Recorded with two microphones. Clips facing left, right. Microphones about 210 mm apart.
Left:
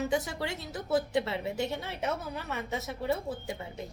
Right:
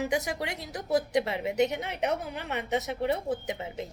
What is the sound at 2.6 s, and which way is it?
Speech, 75° right (ahead or behind).